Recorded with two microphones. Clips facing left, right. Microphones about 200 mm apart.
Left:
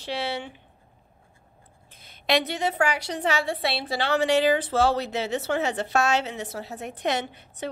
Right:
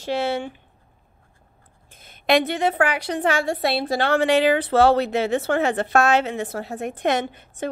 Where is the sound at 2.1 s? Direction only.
55° right (ahead or behind).